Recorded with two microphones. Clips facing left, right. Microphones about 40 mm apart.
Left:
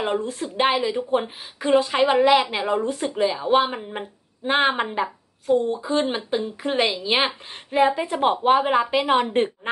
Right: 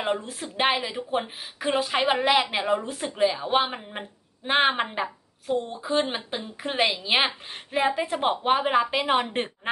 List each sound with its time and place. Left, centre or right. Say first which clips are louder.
0.0 s speech: left 4 dB; centre